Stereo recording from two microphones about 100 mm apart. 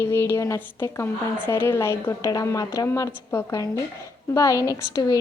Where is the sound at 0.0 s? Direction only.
25° left (ahead or behind).